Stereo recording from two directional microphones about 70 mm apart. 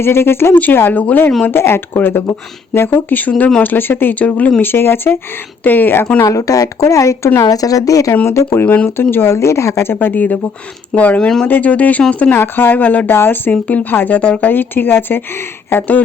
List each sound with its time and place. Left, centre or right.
0.0 s a woman's voice: left
1.5 s a woman's voice: left
4.7 s a woman's voice: left
6.2 s speech: left
7.4 s speech: left
8.6 s speech: left
9.0 s a woman's voice: left